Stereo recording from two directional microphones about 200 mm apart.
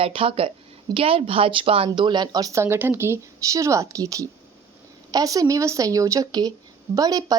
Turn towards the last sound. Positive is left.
turn(degrees=-20)  # may be behind; listen again after turning